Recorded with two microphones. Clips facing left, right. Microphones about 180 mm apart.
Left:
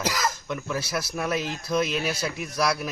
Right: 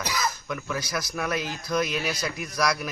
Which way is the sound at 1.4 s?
30° left (ahead or behind).